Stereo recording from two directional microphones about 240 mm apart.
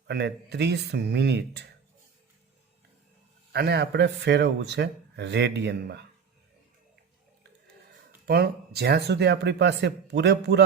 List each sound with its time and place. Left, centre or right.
0.1 s a man's voice: right
3.5 s a man's voice: right
8.3 s a man's voice: right